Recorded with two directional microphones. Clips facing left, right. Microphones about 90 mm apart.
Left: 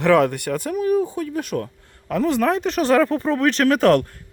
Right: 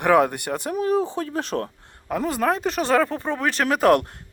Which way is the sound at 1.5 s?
45° right (ahead or behind).